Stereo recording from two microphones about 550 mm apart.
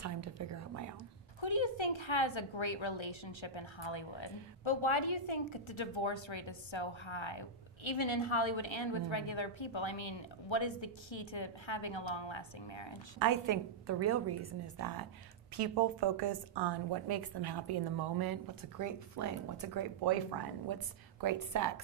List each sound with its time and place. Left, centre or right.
0.0 s a woman's voice: right
1.4 s a woman's voice: left
13.2 s a woman's voice: right
15.5 s a woman's voice: right